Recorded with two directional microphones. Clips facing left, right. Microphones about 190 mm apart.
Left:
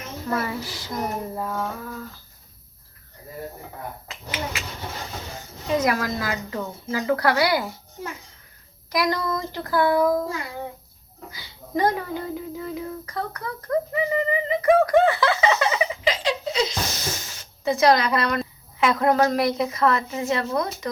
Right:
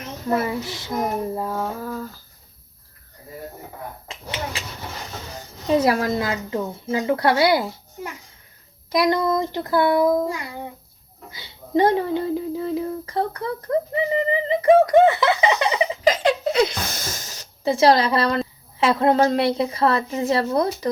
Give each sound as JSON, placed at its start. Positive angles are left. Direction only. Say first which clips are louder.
{"t": 0.3, "sound": "speech", "louder": "right 4 dB", "side_deg": -25}
{"t": 4.1, "sound": "speech", "louder": "right 1 dB", "side_deg": -30}
{"t": 5.6, "sound": "speech", "louder": "right 4 dB", "side_deg": -30}
{"t": 8.9, "sound": "speech", "louder": "right 5 dB", "side_deg": -25}
{"t": 16.0, "sound": "speech", "louder": "right 9 dB", "side_deg": -50}
{"t": 17.2, "sound": "speech", "louder": "right 3 dB", "side_deg": -35}